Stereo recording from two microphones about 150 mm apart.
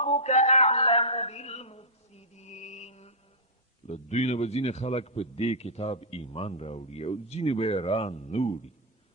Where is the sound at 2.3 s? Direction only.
50° left (ahead or behind).